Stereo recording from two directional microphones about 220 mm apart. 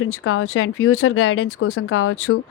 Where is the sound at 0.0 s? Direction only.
70° left (ahead or behind).